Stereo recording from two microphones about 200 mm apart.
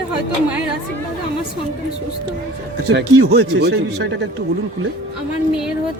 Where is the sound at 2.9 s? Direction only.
55° right (ahead or behind).